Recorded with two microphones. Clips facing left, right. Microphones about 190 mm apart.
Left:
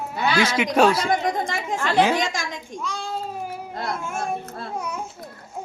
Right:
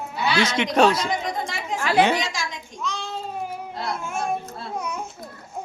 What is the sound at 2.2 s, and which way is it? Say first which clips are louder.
Speech: left 3 dB; 50° left (ahead or behind).